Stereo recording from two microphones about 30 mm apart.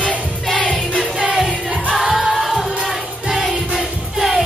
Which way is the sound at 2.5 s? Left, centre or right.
Centre.